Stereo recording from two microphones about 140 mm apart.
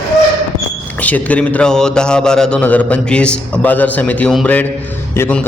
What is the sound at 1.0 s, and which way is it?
A man's voice, 10° left (ahead or behind).